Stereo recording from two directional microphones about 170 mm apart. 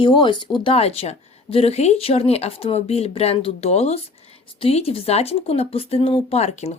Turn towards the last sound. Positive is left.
turn(degrees=40)  # may be behind; listen again after turning